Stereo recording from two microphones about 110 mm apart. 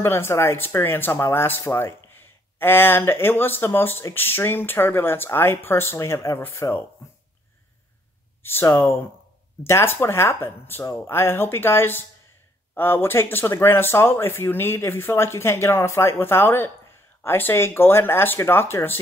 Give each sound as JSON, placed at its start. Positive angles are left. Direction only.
{"t": 0.0, "sound": "speech", "side_deg": 25}
{"t": 8.4, "sound": "speech", "side_deg": 20}